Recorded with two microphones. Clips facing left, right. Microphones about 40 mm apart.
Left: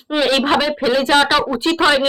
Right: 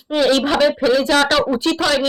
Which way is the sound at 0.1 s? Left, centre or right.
Left.